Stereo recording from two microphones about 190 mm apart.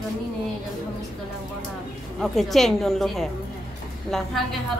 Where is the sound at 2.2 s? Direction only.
Centre (ahead or behind).